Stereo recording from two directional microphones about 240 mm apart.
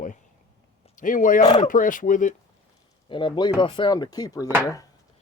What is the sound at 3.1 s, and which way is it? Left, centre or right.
Speech, centre.